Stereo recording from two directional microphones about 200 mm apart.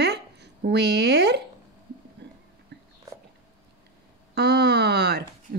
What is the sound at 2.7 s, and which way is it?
Whispering, 60° right (ahead or behind).